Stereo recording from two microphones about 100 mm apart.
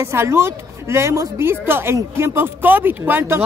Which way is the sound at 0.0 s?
25° right (ahead or behind).